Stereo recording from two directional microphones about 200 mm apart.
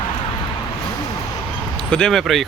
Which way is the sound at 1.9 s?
5° left (ahead or behind).